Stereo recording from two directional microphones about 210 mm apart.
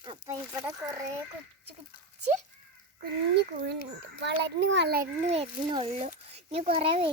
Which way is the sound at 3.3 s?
55° right (ahead or behind).